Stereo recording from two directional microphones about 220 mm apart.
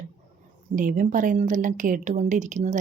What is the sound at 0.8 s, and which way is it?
A woman's voice, 35° right (ahead or behind).